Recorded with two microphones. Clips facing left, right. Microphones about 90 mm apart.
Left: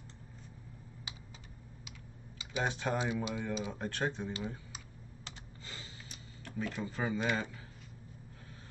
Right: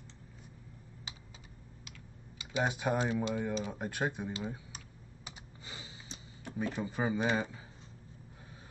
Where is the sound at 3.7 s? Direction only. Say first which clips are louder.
Right 1 dB; 10° right (ahead or behind).